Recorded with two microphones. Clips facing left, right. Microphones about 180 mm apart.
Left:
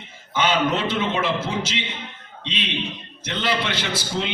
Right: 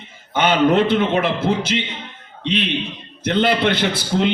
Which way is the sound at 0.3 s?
55° right (ahead or behind).